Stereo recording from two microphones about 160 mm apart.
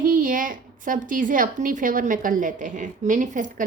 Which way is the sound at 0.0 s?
60° right (ahead or behind).